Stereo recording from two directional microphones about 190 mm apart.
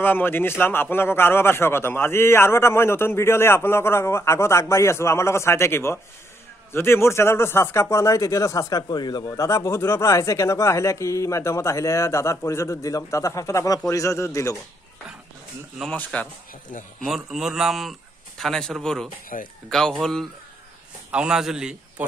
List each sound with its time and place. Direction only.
0.0 s speech: 10° left (ahead or behind)
15.8 s speech: 5° left (ahead or behind)
19.3 s speech: 45° left (ahead or behind)
19.7 s a man's voice: centre (ahead or behind)